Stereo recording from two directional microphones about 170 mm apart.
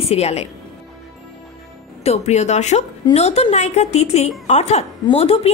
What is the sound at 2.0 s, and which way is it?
A woman's voice, 40° left (ahead or behind).